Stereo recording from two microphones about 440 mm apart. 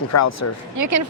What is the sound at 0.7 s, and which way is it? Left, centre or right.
Speech, right.